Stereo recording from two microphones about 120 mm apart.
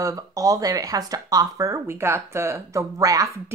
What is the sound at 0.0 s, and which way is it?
Speech, 30° right (ahead or behind).